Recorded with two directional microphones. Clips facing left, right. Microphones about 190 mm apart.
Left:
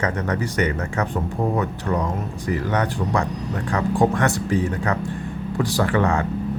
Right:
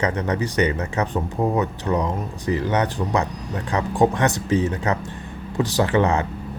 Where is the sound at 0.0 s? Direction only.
20° right (ahead or behind).